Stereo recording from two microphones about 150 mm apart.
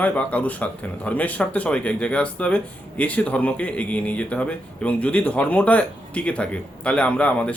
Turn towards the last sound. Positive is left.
turn(degrees=10)  # may be behind; listen again after turning